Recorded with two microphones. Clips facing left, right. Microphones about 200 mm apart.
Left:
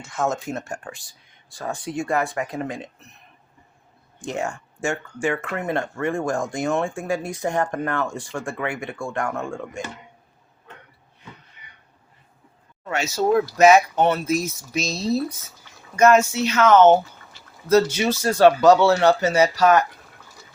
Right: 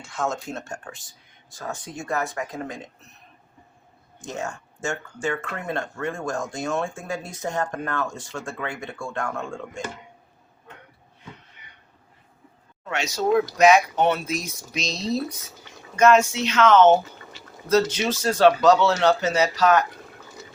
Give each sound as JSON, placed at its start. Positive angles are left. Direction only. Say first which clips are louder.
{"t": 0.2, "sound": "speech", "louder": "left 3 dB", "side_deg": 25}
{"t": 1.7, "sound": "speech", "louder": "left 5 dB", "side_deg": 15}
{"t": 4.3, "sound": "speech", "louder": "left 4 dB", "side_deg": 15}
{"t": 6.3, "sound": "speech", "louder": "left 4 dB", "side_deg": 55}
{"t": 6.7, "sound": "speech", "louder": "left 4 dB", "side_deg": 10}
{"t": 12.9, "sound": "speech", "louder": "left 2 dB", "side_deg": 5}